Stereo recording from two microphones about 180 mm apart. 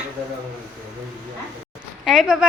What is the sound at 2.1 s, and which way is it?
Speech, centre (ahead or behind).